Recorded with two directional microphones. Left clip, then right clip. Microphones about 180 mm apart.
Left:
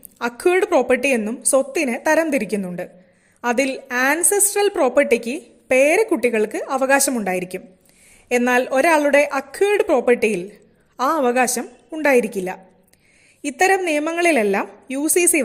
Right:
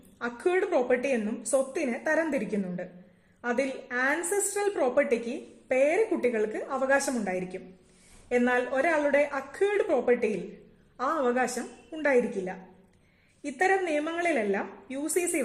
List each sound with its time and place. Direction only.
0.2 s a woman's voice: 40° left (ahead or behind)